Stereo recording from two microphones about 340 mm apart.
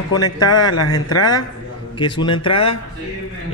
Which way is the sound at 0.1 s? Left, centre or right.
Centre.